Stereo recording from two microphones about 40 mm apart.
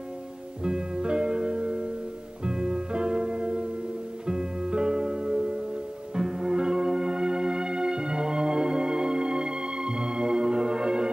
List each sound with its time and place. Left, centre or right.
0.7 s music: centre